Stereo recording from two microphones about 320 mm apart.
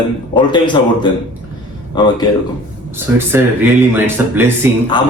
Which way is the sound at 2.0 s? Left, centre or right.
Centre.